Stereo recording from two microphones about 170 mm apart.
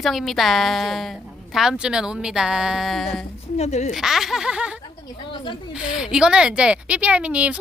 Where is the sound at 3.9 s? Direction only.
Centre (ahead or behind).